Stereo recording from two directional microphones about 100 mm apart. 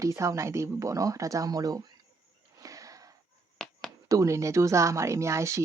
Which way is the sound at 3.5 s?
5° left (ahead or behind).